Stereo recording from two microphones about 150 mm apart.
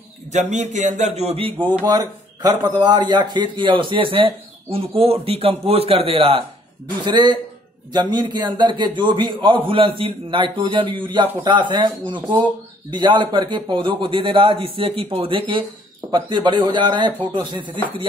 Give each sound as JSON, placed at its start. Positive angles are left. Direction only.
{"t": 0.3, "sound": "speech", "side_deg": -50}
{"t": 1.9, "sound": "a man's voice", "side_deg": -25}